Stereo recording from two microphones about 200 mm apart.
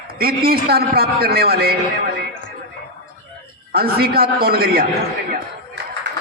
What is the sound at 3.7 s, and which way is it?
A man's voice, 50° right (ahead or behind).